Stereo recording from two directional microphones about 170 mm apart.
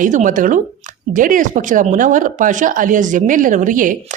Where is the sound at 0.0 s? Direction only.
50° right (ahead or behind).